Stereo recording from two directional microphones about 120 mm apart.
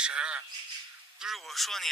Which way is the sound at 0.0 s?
10° right (ahead or behind).